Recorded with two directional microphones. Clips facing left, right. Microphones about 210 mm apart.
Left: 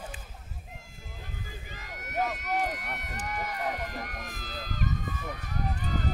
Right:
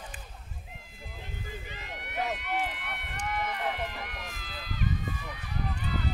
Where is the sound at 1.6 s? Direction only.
45° left (ahead or behind).